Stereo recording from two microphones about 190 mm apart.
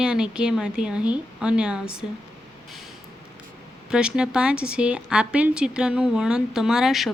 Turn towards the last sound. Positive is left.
turn(degrees=0)  # may be behind; listen again after turning